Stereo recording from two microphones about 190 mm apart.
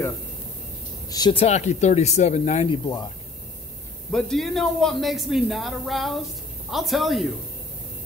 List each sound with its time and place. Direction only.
1.0 s speech: 20° left (ahead or behind); by 2.7 s 35° left (ahead or behind)
2.7 s speech: 20° left (ahead or behind)
4.1 s speech: centre (ahead or behind)